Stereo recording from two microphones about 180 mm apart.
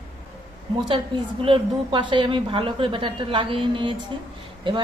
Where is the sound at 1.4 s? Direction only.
30° right (ahead or behind).